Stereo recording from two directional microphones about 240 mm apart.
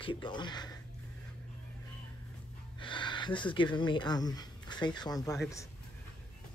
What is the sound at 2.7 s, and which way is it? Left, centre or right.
Speech, centre.